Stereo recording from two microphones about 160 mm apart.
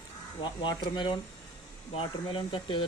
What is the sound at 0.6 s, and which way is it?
Speech, 30° left (ahead or behind).